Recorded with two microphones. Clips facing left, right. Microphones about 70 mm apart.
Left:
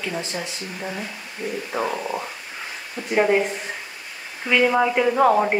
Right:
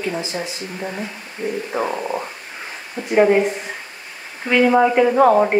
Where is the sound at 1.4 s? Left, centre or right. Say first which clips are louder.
Right 4 dB; right.